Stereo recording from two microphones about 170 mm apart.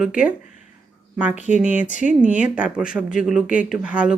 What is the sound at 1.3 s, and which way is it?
Speech, 45° left (ahead or behind).